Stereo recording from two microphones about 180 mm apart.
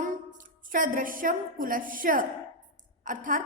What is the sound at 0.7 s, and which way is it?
A woman's voice, 50° right (ahead or behind).